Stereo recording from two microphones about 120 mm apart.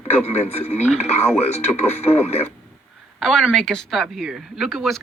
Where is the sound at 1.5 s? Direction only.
65° left (ahead or behind).